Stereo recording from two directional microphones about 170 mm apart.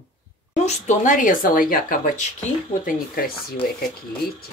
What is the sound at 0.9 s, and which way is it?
Speech, 50° left (ahead or behind).